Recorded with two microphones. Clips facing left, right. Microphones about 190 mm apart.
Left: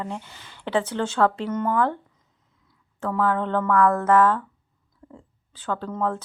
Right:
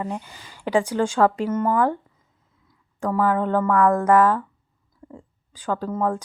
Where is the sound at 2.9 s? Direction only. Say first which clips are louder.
Right 2 dB; 10° right (ahead or behind).